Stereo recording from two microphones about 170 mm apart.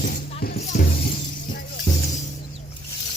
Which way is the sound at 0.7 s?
50° left (ahead or behind).